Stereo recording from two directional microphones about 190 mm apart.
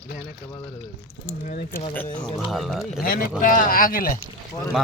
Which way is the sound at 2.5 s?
Centre (ahead or behind).